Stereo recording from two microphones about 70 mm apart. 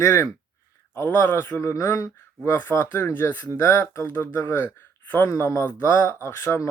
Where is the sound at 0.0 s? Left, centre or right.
Left.